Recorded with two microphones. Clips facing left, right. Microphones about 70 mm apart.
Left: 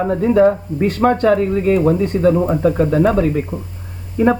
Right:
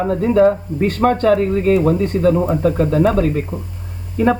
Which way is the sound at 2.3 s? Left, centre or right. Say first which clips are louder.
Left 1 dB; centre.